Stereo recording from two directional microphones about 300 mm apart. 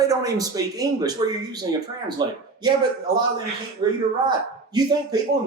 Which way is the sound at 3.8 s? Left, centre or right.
Centre.